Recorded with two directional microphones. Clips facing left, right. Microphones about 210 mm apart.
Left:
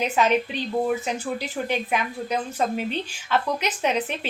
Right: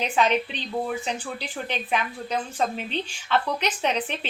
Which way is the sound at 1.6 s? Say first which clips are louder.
Left 1 dB; 10° left (ahead or behind).